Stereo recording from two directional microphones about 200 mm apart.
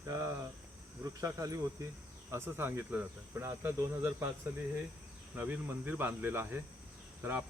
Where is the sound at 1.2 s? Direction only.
15° right (ahead or behind).